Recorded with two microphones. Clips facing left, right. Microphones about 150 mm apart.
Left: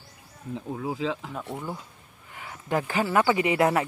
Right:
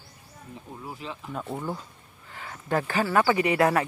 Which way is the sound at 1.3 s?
5° right (ahead or behind).